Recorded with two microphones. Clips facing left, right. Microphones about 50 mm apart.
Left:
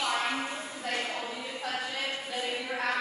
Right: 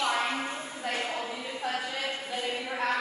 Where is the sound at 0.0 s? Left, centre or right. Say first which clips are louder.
Right 1 dB; centre.